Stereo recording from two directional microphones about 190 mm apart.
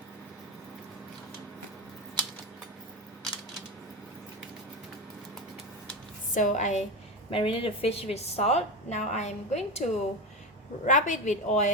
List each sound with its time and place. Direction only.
6.3 s a woman's voice: 40° left (ahead or behind)